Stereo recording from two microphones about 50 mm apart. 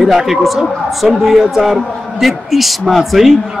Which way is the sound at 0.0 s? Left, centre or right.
Centre.